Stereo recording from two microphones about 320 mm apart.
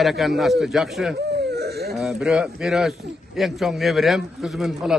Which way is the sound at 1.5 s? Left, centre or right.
Right.